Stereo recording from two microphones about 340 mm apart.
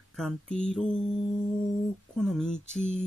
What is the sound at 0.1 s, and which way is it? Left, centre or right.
Speech, centre.